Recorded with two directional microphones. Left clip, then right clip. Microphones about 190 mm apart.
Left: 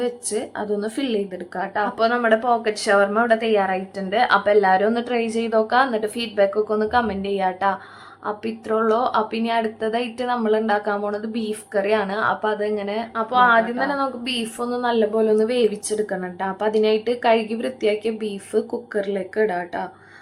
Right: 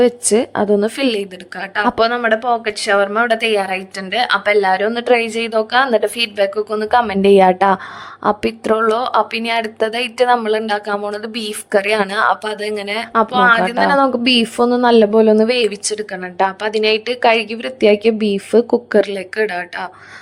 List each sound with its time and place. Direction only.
0.0 s a woman's voice: 45° right (ahead or behind)